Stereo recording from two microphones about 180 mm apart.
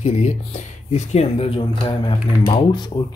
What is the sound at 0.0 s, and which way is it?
Speech, 40° left (ahead or behind).